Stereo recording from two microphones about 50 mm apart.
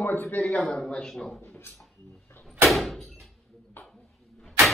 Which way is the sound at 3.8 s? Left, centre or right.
Left.